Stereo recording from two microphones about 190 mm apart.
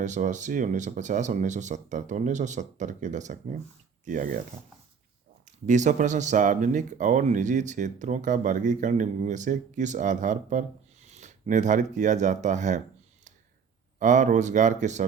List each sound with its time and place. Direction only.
0.0 s speech: 40° right (ahead or behind)
5.6 s speech: 40° right (ahead or behind)
14.0 s speech: 40° right (ahead or behind)